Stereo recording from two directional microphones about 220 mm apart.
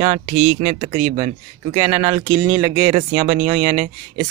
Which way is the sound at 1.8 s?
20° right (ahead or behind).